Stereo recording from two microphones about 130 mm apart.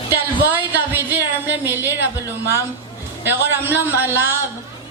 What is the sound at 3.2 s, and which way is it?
Speech, 15° right (ahead or behind).